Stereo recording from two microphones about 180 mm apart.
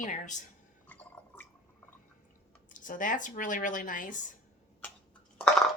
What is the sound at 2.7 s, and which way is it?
A woman's voice, 45° left (ahead or behind).